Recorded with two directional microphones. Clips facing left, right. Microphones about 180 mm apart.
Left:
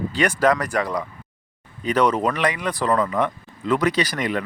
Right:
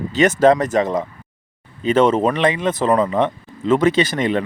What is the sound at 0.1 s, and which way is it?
Speech, 20° right (ahead or behind).